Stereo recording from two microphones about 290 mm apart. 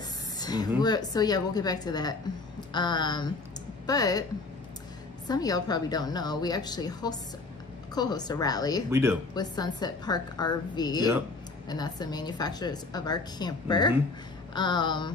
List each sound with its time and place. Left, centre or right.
0.4 s a sound: centre
0.7 s a woman's voice: centre
5.3 s a woman's voice: centre